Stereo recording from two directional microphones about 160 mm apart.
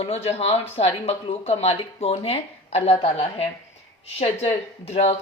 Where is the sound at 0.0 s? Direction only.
40° left (ahead or behind).